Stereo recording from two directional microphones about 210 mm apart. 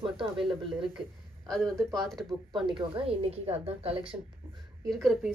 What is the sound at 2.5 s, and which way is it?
A woman's voice, 20° right (ahead or behind).